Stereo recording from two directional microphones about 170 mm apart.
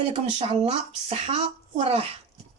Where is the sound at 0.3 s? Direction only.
35° right (ahead or behind).